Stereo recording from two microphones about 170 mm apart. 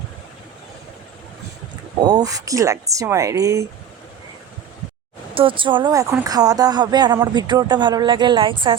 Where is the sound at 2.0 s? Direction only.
20° right (ahead or behind).